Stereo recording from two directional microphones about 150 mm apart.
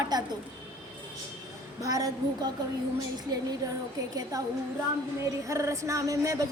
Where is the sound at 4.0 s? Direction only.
25° right (ahead or behind).